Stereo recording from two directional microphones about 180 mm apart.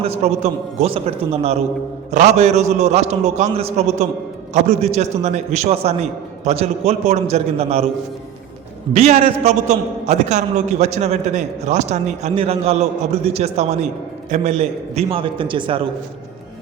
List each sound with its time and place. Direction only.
0.0 s a man's voice: 35° right (ahead or behind)
8.9 s a man's voice: 35° right (ahead or behind)